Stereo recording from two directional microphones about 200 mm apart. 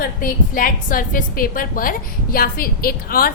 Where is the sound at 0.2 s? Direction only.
45° left (ahead or behind).